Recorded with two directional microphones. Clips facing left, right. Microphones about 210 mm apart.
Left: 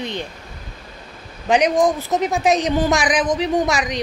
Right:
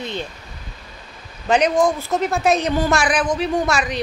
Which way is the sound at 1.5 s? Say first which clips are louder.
Left 1 dB; 15° left (ahead or behind).